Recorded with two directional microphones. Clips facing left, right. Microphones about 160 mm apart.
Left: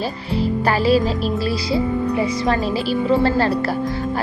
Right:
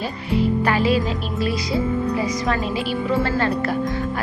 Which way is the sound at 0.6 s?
35° left (ahead or behind).